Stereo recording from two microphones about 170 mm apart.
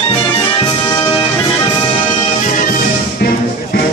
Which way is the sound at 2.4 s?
50° left (ahead or behind).